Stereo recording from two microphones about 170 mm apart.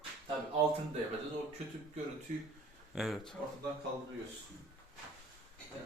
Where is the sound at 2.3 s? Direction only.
45° right (ahead or behind).